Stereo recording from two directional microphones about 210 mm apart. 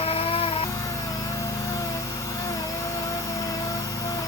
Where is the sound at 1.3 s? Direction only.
15° left (ahead or behind).